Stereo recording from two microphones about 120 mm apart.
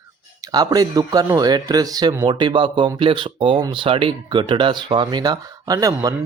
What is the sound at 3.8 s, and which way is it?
Speech, 45° right (ahead or behind).